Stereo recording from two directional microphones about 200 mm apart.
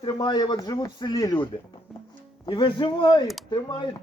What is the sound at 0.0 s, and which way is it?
Speech, 20° left (ahead or behind).